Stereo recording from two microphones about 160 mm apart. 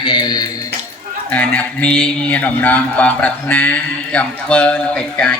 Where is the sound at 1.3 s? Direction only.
10° left (ahead or behind).